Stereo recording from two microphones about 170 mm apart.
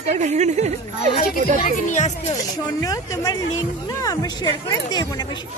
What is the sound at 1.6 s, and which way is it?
Speech, 45° left (ahead or behind).